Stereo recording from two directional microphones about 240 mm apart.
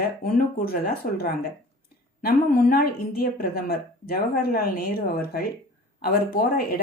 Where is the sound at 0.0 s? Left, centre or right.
Left.